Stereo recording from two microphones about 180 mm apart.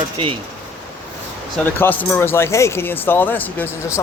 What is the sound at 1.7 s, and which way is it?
Speech, 10° left (ahead or behind).